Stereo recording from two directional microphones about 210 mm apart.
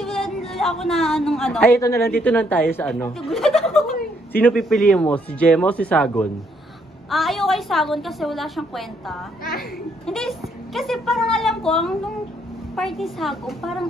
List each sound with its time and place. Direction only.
0.0 s a sound: centre (ahead or behind)
0.5 s a woman's voice: centre (ahead or behind)
9.4 s a child's voice: 45° left (ahead or behind)
10.0 s a woman's voice: centre (ahead or behind)